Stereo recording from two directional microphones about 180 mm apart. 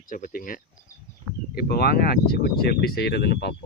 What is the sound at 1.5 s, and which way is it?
Speech, 60° left (ahead or behind).